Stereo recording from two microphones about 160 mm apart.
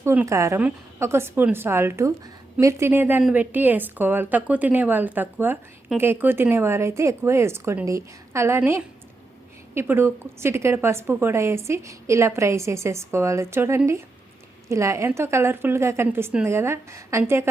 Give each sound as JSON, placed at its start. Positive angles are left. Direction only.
{"t": 0.0, "sound": "a woman's voice", "side_deg": -15}